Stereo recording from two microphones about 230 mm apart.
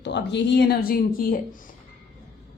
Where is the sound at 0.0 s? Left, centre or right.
Left.